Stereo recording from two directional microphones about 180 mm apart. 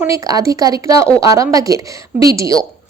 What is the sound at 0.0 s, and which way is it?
A woman's voice, 20° right (ahead or behind).